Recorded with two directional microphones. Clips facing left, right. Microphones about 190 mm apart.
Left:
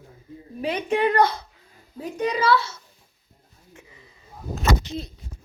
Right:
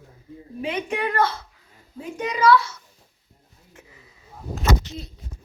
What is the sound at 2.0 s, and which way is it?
Speech, 30° left (ahead or behind).